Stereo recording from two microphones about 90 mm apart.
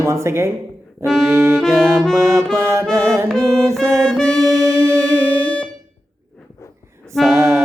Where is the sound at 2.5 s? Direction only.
30° right (ahead or behind).